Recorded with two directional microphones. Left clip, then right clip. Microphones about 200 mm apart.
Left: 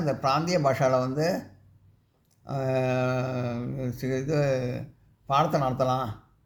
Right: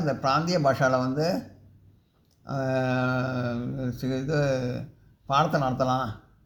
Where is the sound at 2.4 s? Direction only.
30° left (ahead or behind).